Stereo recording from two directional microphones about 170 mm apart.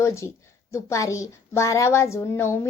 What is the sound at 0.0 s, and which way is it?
A woman's voice, 15° left (ahead or behind).